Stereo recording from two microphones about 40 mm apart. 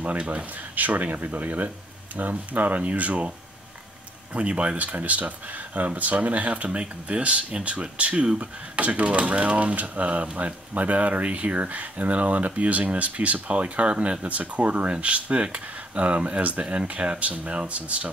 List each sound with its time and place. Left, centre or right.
0.2 s speech: right
0.7 s speech: right